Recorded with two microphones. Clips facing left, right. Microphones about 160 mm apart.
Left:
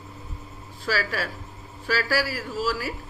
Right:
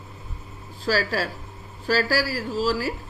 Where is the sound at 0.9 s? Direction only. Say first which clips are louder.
Right 4 dB; 30° right (ahead or behind).